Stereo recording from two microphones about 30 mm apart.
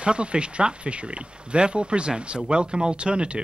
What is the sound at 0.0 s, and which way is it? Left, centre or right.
Speech, right.